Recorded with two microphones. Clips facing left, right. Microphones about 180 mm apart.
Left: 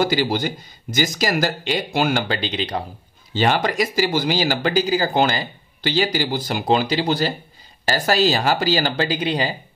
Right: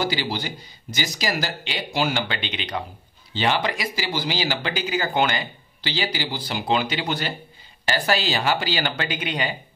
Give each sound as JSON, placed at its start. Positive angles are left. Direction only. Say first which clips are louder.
{"t": 0.0, "sound": "speech", "louder": "left 6 dB", "side_deg": 45}
{"t": 3.3, "sound": "speech", "louder": "left 4 dB", "side_deg": 45}
{"t": 5.8, "sound": "speech", "louder": "left 7 dB", "side_deg": 45}